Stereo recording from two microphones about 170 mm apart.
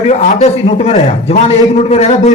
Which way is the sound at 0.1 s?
40° left (ahead or behind).